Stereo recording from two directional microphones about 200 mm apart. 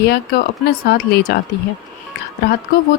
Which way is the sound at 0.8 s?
55° left (ahead or behind).